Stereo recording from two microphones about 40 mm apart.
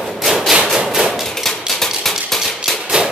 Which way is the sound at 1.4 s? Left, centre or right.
Centre.